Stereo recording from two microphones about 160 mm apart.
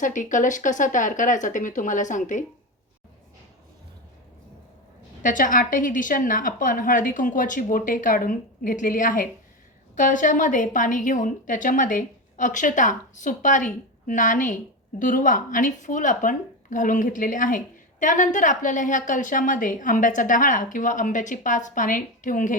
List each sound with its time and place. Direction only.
0.0 s a woman's voice: 55° left (ahead or behind)
5.2 s a woman's voice: 55° left (ahead or behind)